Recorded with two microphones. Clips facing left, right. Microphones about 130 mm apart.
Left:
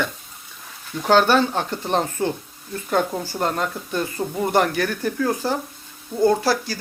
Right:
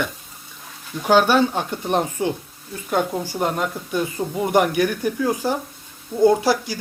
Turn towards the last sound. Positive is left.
turn(degrees=-15)  # may be behind; listen again after turning